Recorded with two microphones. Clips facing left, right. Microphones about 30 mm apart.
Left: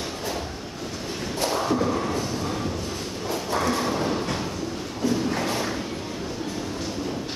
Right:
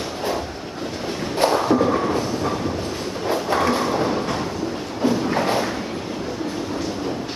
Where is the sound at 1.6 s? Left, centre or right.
Right.